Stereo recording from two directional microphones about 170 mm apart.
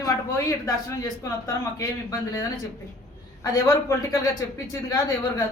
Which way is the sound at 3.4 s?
20° left (ahead or behind).